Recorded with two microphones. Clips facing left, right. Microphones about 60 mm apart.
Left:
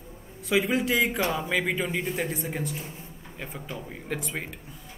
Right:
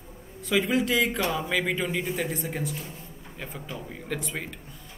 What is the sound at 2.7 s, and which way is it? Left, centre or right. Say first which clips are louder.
Speech: even; left.